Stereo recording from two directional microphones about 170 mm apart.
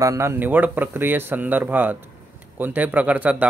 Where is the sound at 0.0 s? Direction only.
15° right (ahead or behind).